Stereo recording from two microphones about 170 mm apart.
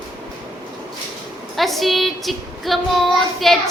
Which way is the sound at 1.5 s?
Centre (ahead or behind).